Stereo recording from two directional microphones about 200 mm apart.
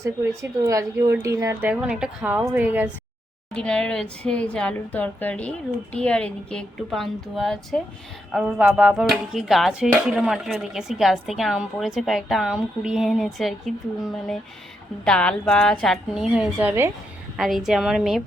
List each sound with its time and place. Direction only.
0.6 s a woman's voice: 15° right (ahead or behind)
1.7 s speech: 5° right (ahead or behind)
3.5 s speech: 5° left (ahead or behind)